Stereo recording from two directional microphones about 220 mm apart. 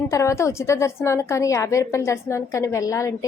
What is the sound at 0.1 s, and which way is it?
A woman's voice, 15° left (ahead or behind).